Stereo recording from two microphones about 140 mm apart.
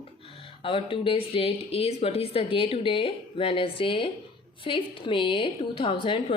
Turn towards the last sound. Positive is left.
turn(degrees=40)  # may be behind; listen again after turning